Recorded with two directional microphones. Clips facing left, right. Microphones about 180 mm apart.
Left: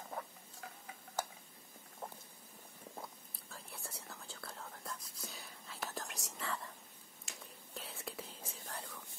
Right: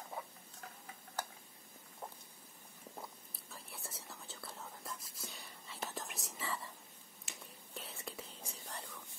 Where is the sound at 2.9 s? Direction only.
Centre (ahead or behind).